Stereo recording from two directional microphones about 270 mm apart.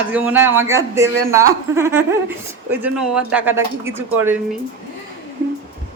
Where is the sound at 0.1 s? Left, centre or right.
Centre.